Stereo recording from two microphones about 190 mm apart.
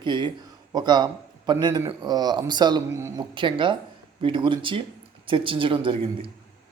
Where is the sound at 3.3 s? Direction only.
25° right (ahead or behind).